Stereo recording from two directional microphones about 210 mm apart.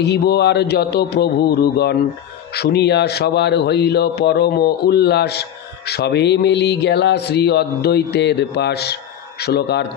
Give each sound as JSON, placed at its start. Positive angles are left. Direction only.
{"t": 0.0, "sound": "speech", "side_deg": 50}